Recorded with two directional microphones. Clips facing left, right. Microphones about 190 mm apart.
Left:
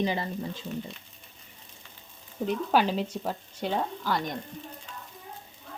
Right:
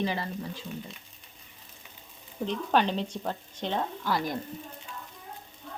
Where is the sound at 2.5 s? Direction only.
5° left (ahead or behind).